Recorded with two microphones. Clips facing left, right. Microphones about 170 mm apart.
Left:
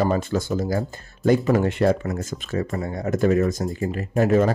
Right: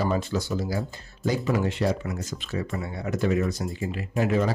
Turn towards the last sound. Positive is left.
turn(degrees=45)  # may be behind; listen again after turning